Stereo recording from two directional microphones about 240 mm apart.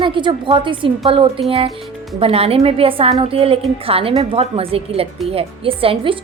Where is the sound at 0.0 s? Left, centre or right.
Right.